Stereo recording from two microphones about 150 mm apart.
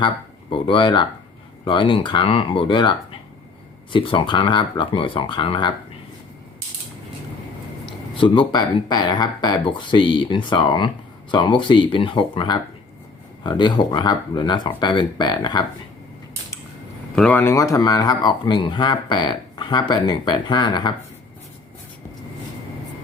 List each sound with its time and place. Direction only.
0.5 s speech: 35° left (ahead or behind)
7.9 s speech: 35° left (ahead or behind)
17.2 s speech: 10° left (ahead or behind); by 20.9 s 30° left (ahead or behind)